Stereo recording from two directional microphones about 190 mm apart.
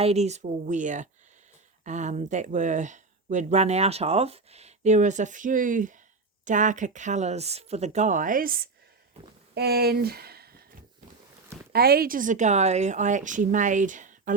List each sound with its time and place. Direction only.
0.0 s speech: 35° right (ahead or behind); by 10.5 s 55° right (ahead or behind)
11.7 s speech: 55° right (ahead or behind)